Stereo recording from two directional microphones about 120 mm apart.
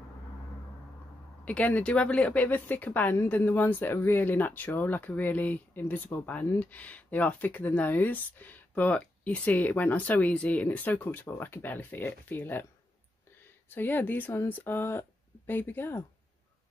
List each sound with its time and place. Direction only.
1.4 s speech: 10° left (ahead or behind)
13.7 s speech: 15° left (ahead or behind)